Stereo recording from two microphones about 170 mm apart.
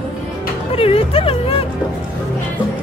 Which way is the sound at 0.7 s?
35° left (ahead or behind).